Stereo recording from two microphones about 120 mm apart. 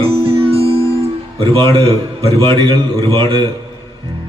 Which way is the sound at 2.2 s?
50° right (ahead or behind).